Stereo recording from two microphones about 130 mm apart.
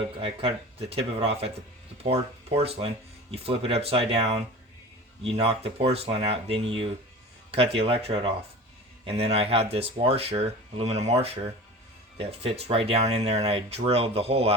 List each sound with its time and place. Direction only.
0.2 s speech: 45° right (ahead or behind)
2.6 s speech: 50° right (ahead or behind)